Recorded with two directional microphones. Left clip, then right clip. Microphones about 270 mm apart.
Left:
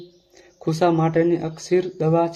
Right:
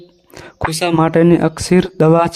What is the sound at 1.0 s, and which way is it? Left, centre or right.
A man's voice, right.